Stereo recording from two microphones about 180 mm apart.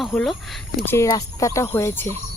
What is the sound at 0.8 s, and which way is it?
Speech, 15° left (ahead or behind).